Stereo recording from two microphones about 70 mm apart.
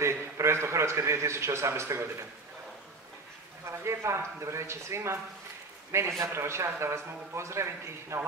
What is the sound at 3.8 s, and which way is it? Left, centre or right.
Speech, right.